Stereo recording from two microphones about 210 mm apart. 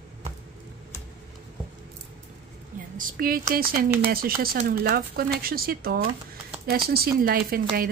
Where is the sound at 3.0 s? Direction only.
40° right (ahead or behind).